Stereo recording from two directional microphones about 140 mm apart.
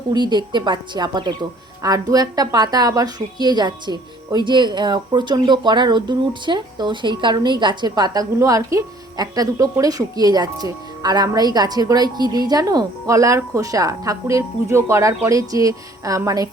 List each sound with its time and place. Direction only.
0.1 s a woman's voice: 30° right (ahead or behind)